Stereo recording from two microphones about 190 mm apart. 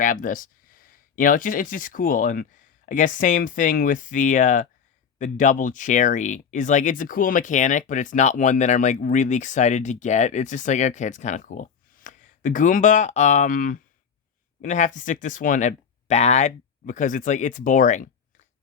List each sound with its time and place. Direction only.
0.0 s speech: 45° left (ahead or behind)